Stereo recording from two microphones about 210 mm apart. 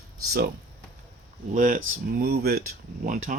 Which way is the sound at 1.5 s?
40° right (ahead or behind).